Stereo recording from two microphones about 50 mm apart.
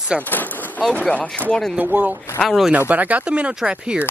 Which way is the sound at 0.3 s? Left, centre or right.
Left.